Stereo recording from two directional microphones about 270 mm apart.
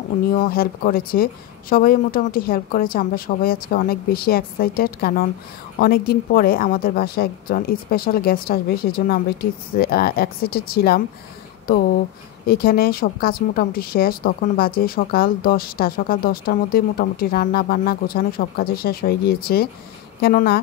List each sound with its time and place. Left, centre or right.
0.3 s speech: left